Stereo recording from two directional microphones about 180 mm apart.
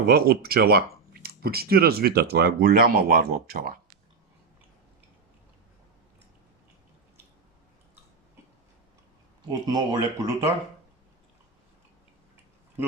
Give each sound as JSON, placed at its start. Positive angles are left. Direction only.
{"t": 0.0, "sound": "speech", "side_deg": -60}
{"t": 9.5, "sound": "speech", "side_deg": -20}